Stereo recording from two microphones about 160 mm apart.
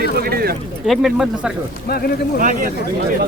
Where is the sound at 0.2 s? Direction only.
75° right (ahead or behind).